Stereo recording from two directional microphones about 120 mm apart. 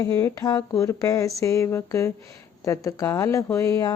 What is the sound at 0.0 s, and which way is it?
A woman's voice, 25° left (ahead or behind).